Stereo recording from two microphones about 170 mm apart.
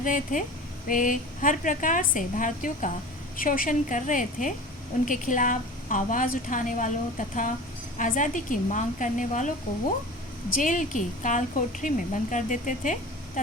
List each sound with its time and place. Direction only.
0.0 s speech: 50° left (ahead or behind)
10.5 s speech: 50° left (ahead or behind)